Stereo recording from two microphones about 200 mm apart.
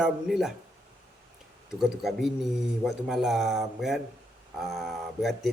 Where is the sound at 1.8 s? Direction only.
Centre (ahead or behind).